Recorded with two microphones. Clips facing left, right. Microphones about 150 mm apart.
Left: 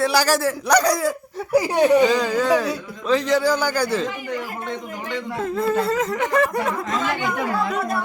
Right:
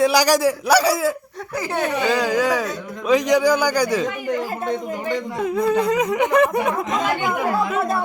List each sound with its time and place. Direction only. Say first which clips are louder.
0.0 s speech: right 3 dB; 15° right (ahead or behind)
1.5 s speech: left 7 dB; 15° left (ahead or behind)
2.0 s speech: even; 10° right (ahead or behind)
5.4 s speech: right 2 dB; 15° right (ahead or behind)